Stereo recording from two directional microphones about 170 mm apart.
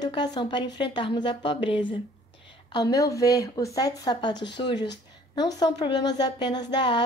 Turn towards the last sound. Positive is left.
turn(degrees=25)  # may be behind; listen again after turning